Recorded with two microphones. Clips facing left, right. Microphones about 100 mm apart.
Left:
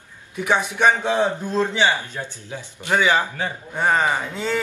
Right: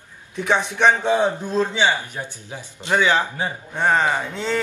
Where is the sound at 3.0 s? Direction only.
10° left (ahead or behind).